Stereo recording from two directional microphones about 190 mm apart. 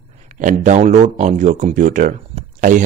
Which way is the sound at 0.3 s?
40° right (ahead or behind).